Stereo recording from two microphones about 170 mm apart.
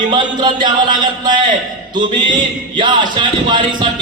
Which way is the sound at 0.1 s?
25° right (ahead or behind).